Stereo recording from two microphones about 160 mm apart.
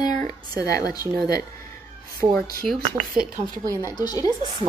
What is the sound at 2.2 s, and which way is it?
Speech, 25° right (ahead or behind).